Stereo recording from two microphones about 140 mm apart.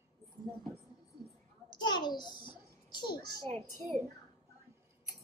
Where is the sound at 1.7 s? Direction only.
30° left (ahead or behind).